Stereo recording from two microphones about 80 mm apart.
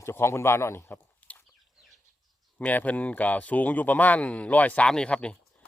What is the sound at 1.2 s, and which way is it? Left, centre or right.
Chicken, centre.